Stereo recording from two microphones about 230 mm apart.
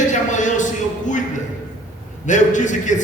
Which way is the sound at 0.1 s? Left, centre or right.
Left.